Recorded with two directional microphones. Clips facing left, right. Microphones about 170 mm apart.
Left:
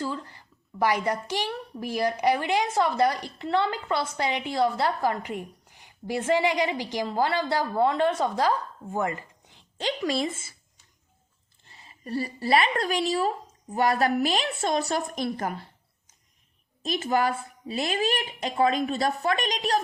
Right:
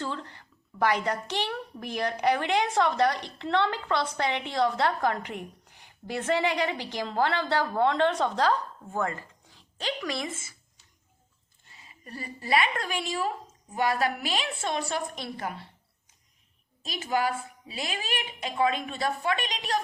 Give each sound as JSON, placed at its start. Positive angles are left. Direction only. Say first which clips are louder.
{"t": 0.0, "sound": "a woman's voice", "louder": "left 2 dB", "side_deg": 5}
{"t": 11.7, "sound": "a woman's voice", "louder": "left 12 dB", "side_deg": 35}
{"t": 16.8, "sound": "a woman's voice", "louder": "left 3 dB", "side_deg": 45}